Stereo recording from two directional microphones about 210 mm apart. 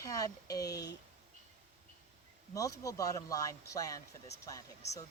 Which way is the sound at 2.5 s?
15° left (ahead or behind).